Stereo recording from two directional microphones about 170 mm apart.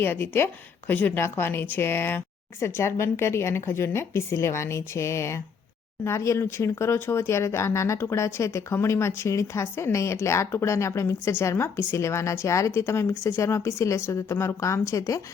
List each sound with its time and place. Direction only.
0.0 s speech: 10° left (ahead or behind)